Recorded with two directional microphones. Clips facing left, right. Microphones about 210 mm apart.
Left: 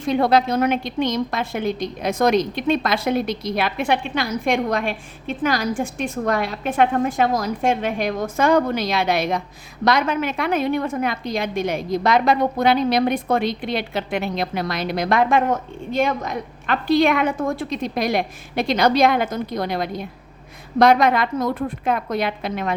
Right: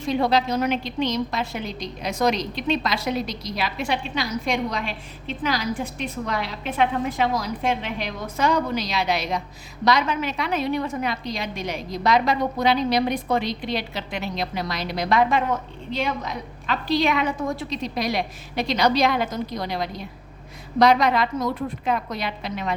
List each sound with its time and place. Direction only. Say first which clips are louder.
0.0 s a woman's voice: left 4 dB; 55° left (ahead or behind)